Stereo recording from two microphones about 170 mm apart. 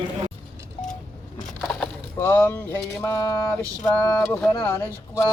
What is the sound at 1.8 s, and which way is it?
Speech, 10° left (ahead or behind).